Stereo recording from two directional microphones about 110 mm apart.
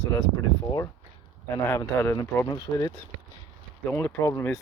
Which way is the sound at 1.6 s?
25° left (ahead or behind).